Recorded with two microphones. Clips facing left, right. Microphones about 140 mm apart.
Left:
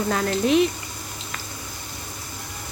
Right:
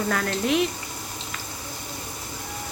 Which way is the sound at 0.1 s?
20° left (ahead or behind).